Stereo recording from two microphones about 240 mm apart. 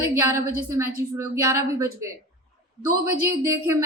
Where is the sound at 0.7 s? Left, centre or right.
Centre.